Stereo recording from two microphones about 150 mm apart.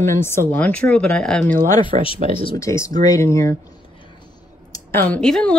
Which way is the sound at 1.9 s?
50° right (ahead or behind).